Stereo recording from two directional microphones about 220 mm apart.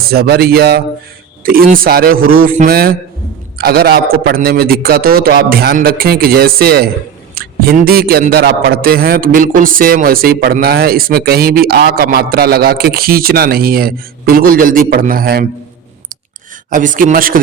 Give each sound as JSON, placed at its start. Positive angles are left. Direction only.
{"t": 0.1, "sound": "a man's voice", "side_deg": -45}
{"t": 16.6, "sound": "speech", "side_deg": -35}